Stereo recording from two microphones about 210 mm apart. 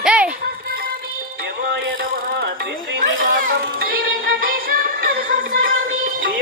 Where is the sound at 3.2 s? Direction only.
40° right (ahead or behind).